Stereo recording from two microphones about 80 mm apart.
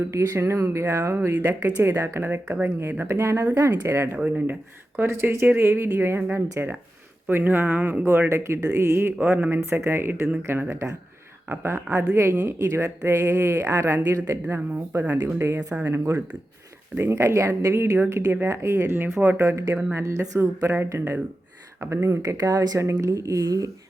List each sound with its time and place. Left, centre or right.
0.0 s speech: right
1.8 s speech: right
3.0 s speech: right
4.2 s speech: centre
4.9 s speech: right
8.3 s speech: right
9.2 s speech: right
9.6 s speech: right
17.0 s speech: right
19.5 s speech: right